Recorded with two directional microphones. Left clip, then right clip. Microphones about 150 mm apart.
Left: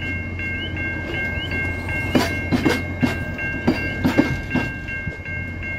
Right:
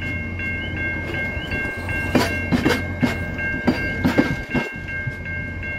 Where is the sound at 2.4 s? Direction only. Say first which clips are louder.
Even; 10° right (ahead or behind).